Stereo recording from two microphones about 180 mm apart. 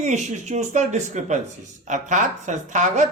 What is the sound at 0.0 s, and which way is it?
Speech, 40° right (ahead or behind).